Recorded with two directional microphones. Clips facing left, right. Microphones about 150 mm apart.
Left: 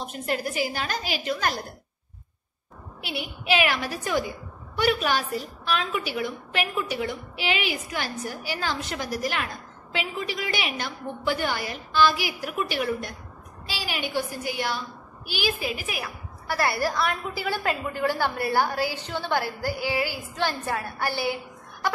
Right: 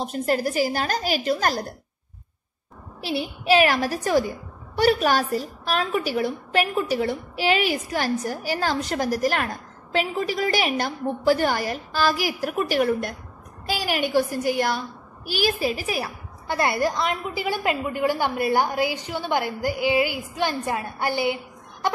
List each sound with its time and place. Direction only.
0.0 s a woman's voice: 40° right (ahead or behind)
3.0 s a woman's voice: 35° right (ahead or behind)
16.4 s a woman's voice: 20° right (ahead or behind)